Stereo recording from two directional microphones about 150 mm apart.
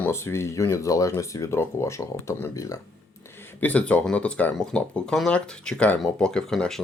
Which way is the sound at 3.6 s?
10° left (ahead or behind).